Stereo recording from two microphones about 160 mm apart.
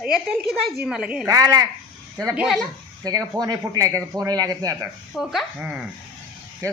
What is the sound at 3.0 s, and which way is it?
Speech, 25° right (ahead or behind).